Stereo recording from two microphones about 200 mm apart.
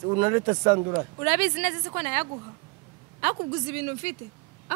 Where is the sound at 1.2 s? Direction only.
10° right (ahead or behind).